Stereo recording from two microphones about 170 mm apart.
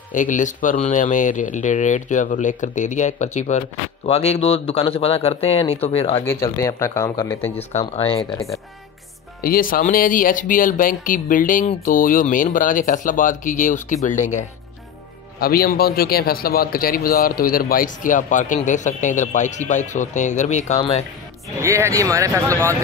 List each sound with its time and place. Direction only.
0.1 s speech: 50° left (ahead or behind)
6.2 s speech: 15° left (ahead or behind)
7.8 s speech: 35° left (ahead or behind)
9.4 s speech: 55° left (ahead or behind)
15.4 s speech: 60° left (ahead or behind); by 20.8 s 40° left (ahead or behind)
21.5 s speech: 15° right (ahead or behind)